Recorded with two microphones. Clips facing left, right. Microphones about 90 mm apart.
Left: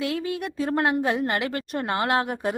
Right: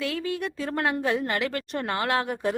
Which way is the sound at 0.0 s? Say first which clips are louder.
Left 1 dB; 20° left (ahead or behind).